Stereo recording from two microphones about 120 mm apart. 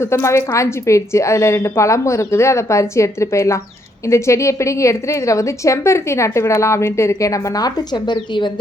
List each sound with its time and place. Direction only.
0.0 s a woman's voice: 20° left (ahead or behind); by 8.5 s 40° left (ahead or behind)